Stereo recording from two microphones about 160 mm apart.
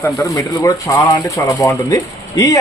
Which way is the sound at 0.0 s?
20° left (ahead or behind).